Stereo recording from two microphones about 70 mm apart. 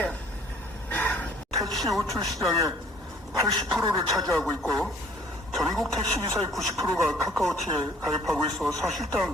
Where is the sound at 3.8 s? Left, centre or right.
Right.